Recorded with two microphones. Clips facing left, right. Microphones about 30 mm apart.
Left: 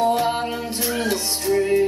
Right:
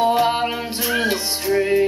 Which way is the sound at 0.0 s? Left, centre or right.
Right.